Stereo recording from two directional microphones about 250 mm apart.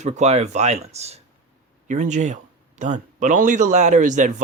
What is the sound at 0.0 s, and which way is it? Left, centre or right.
Speech, right.